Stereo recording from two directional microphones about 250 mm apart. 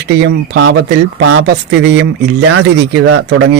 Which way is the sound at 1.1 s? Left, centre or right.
Right.